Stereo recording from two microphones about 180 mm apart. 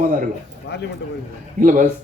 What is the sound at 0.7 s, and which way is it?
Speech, 65° left (ahead or behind).